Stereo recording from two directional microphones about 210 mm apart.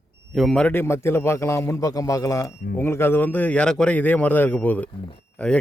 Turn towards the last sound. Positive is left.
turn(degrees=5)  # may be behind; listen again after turning